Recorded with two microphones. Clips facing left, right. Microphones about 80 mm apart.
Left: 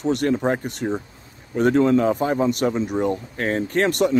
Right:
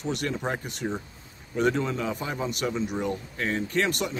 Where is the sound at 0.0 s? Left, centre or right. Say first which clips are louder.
Left 9 dB; left.